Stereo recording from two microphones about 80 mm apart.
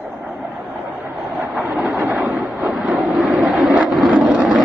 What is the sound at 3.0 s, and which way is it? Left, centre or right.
Vehicle, centre.